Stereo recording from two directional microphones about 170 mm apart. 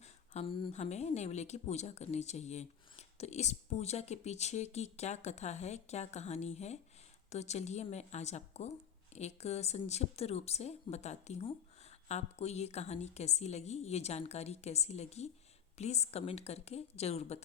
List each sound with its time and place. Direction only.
0.0 s speech: 35° left (ahead or behind)